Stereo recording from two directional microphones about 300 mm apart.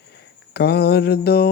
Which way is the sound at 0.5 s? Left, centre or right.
Left.